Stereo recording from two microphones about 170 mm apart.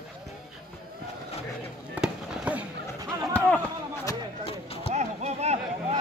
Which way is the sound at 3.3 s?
10° left (ahead or behind).